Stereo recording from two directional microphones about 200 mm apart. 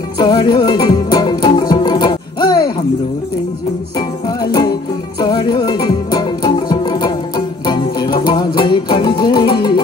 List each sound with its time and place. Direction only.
0.2 s music: 20° left (ahead or behind)
4.5 s music: 20° left (ahead or behind)